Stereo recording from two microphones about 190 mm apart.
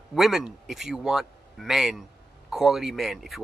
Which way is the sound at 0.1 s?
Centre (ahead or behind).